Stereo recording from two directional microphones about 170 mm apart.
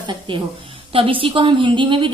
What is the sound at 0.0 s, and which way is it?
A woman's voice, 30° right (ahead or behind).